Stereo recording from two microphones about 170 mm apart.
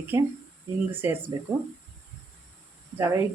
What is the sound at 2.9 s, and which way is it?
Speech, 15° right (ahead or behind).